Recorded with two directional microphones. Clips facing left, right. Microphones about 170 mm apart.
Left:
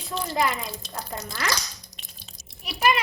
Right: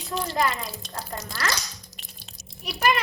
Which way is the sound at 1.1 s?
20° left (ahead or behind).